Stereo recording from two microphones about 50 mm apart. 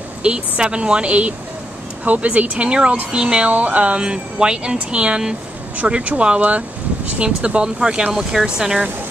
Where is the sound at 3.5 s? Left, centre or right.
Right; by 8.8 s centre.